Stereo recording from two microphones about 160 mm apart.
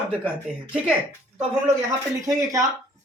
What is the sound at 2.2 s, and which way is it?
Speech, 20° right (ahead or behind).